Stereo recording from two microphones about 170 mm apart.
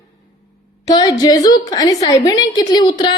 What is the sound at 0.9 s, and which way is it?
A woman's voice, 25° left (ahead or behind).